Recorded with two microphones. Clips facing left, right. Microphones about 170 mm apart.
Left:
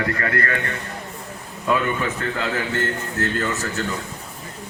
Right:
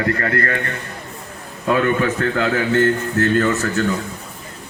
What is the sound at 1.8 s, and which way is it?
Speech, 65° right (ahead or behind).